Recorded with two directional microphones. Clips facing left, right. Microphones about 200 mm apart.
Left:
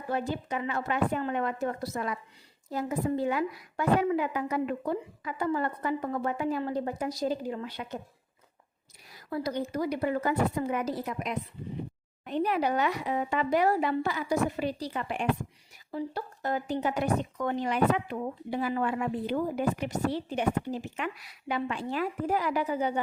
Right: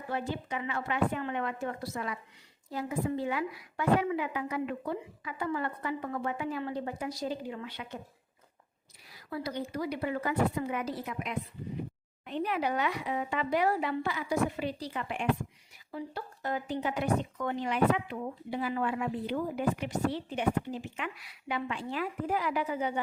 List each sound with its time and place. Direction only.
0.1 s speech: 40° left (ahead or behind)
9.1 s a woman's voice: 45° left (ahead or behind)